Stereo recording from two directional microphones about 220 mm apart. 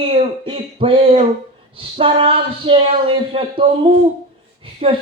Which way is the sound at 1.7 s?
25° right (ahead or behind).